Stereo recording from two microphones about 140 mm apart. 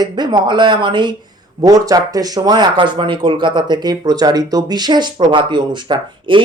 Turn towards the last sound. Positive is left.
turn(degrees=-35)  # may be behind; listen again after turning